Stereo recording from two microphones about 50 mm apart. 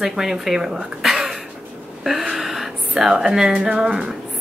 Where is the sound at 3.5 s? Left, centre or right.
Right.